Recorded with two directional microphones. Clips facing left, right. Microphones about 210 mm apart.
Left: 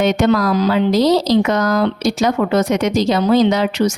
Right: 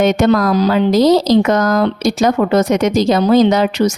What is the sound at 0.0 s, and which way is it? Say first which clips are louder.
Speech: right 2 dB; 45° right (ahead or behind).